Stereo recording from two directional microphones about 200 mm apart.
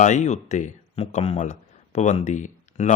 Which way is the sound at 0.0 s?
35° left (ahead or behind).